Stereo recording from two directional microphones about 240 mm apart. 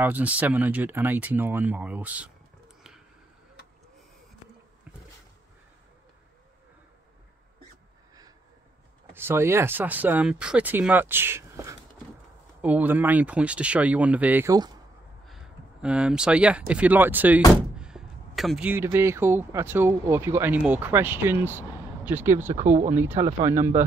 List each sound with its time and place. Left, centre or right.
0.0 s speech: centre
9.1 s speech: centre
15.2 s speech: centre
22.6 s speech: right
22.8 s speech: centre